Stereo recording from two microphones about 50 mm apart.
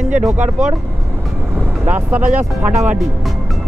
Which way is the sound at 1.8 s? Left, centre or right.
Right.